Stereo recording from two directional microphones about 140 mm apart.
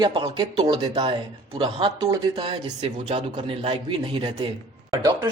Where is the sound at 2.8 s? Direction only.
50° right (ahead or behind).